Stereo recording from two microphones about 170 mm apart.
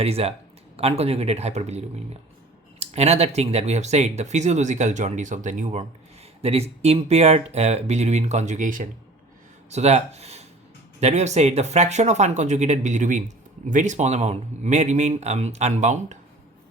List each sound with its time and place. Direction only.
0.0 s speech: 35° right (ahead or behind)